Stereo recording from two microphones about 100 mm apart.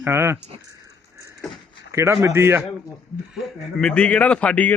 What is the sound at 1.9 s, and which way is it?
Speech, 25° right (ahead or behind).